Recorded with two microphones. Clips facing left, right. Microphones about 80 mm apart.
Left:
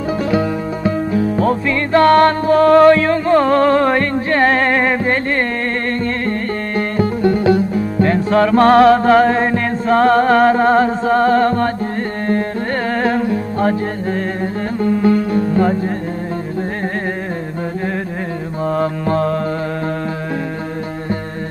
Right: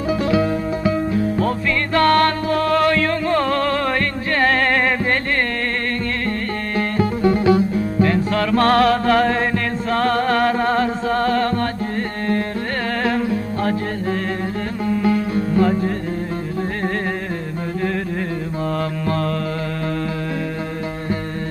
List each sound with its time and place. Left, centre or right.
1.4 s music: centre
8.0 s music: left
12.9 s music: left
15.0 s music: left
18.6 s mantra: centre